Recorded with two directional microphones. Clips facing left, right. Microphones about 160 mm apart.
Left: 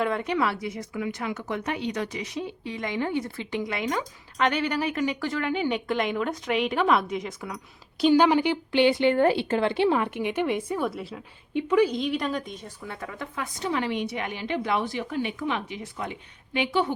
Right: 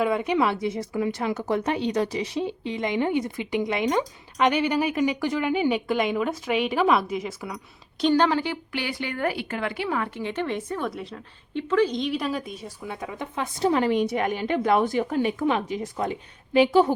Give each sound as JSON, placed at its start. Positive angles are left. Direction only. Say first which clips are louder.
{"t": 0.0, "sound": "speech", "louder": "right 3 dB", "side_deg": -10}
{"t": 8.0, "sound": "speech", "louder": "left 2 dB", "side_deg": 10}
{"t": 13.7, "sound": "a woman's voice", "louder": "right 6 dB", "side_deg": -40}